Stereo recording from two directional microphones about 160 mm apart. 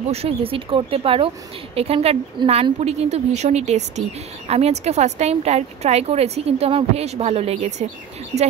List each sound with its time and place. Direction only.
0.1 s speech: 35° right (ahead or behind)